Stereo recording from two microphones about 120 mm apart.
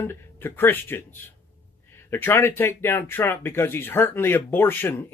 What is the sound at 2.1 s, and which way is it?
Speech, 20° left (ahead or behind).